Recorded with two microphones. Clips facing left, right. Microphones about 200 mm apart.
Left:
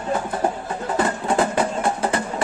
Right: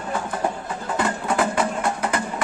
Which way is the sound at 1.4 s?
30° left (ahead or behind).